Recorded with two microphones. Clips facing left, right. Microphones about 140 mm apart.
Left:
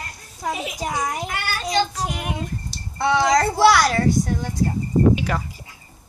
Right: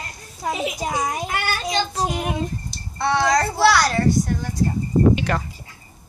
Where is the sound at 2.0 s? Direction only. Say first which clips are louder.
Right 4 dB; 25° right (ahead or behind).